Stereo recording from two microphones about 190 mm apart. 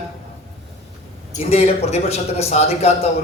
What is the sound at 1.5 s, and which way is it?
A man's voice, 35° left (ahead or behind).